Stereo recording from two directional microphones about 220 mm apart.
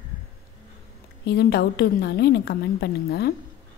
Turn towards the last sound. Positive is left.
turn(degrees=50)  # may be behind; listen again after turning